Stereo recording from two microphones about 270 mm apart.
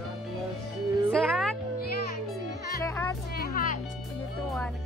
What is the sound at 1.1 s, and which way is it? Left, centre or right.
Music, centre.